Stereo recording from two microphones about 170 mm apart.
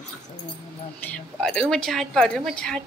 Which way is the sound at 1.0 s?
5° left (ahead or behind).